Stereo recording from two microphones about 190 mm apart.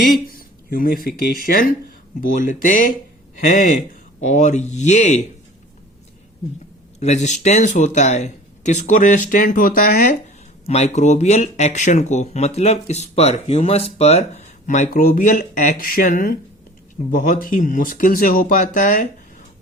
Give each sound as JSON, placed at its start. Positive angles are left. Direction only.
{"t": 0.3, "sound": "speech", "side_deg": 50}
{"t": 4.2, "sound": "speech", "side_deg": 40}
{"t": 7.0, "sound": "speech", "side_deg": 35}
{"t": 10.7, "sound": "speech", "side_deg": 35}